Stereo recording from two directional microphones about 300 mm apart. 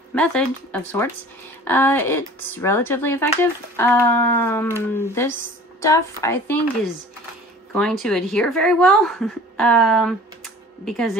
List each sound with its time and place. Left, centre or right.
0.1 s a woman's voice: centre
7.7 s a woman's voice: centre